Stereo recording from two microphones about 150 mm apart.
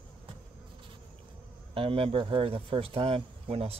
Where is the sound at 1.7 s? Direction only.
40° right (ahead or behind).